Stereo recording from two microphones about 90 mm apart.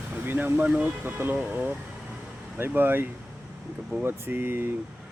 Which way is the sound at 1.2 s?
25° right (ahead or behind).